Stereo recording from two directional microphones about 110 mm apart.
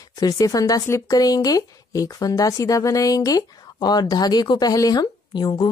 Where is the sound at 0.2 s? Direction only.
35° left (ahead or behind).